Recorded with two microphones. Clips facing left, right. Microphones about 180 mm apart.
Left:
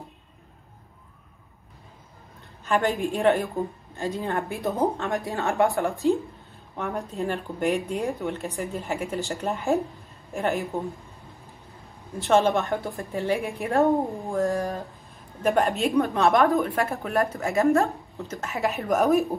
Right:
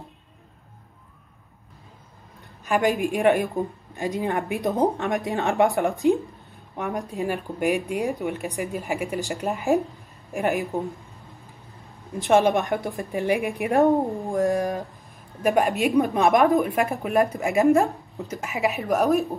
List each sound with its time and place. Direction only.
2.6 s a woman's voice: 15° right (ahead or behind)
12.1 s a woman's voice: 15° right (ahead or behind)
18.5 s speech: centre (ahead or behind)